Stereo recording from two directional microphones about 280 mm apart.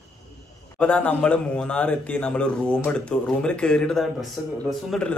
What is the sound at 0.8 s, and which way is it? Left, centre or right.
A man's voice, centre.